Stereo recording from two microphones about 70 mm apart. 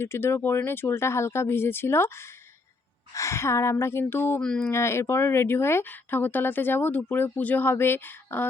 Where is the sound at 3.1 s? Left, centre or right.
Left.